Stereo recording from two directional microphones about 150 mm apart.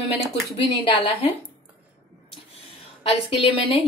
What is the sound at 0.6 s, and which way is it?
Speech, 35° left (ahead or behind).